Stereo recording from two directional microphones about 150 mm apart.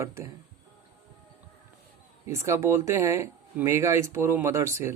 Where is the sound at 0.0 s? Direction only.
20° right (ahead or behind).